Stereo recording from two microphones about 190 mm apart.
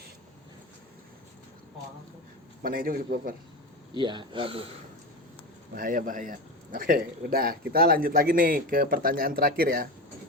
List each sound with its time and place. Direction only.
2.6 s a man's voice: 50° right (ahead or behind)
3.9 s speech: 25° right (ahead or behind)
5.7 s a man's voice: 45° right (ahead or behind)